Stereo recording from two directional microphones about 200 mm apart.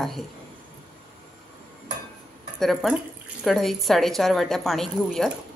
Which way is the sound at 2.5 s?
Centre (ahead or behind).